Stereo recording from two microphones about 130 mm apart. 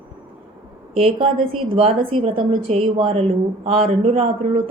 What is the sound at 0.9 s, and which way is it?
A woman's voice, 50° right (ahead or behind).